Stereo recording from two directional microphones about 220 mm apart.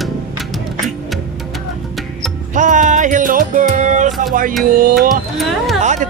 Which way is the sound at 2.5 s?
35° right (ahead or behind).